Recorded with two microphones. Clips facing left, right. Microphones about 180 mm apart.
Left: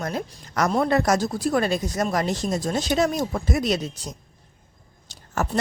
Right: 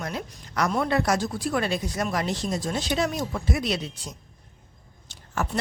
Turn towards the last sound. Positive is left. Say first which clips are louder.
# left 3 dB
turn(degrees=40)  # may be behind; listen again after turning